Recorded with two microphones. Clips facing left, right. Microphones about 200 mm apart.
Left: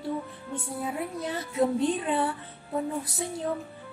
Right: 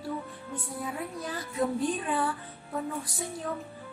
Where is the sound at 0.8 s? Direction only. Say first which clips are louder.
Left 4 dB; 25° left (ahead or behind).